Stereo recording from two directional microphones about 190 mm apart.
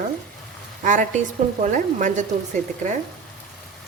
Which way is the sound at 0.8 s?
40° right (ahead or behind).